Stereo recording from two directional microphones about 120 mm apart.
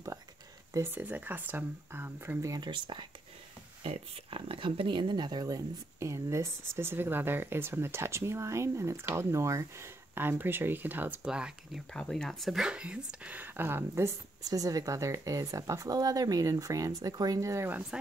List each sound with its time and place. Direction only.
0.7 s speech: 15° right (ahead or behind)
2.5 s speech: 40° right (ahead or behind)
3.8 s speech: 55° right (ahead or behind); by 11.8 s 5° right (ahead or behind)
11.9 s speech: 5° left (ahead or behind); by 17.7 s 25° right (ahead or behind)